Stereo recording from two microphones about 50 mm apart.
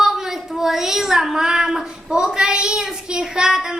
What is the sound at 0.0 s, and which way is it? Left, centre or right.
A woman's voice, centre.